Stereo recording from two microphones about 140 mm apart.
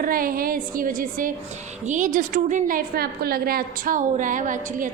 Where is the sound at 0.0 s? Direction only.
90° right.